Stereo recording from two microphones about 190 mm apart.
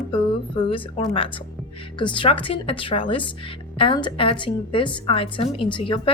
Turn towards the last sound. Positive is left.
turn(degrees=25)  # may be behind; listen again after turning